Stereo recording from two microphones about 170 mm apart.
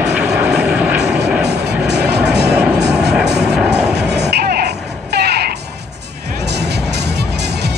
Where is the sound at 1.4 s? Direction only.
80° right.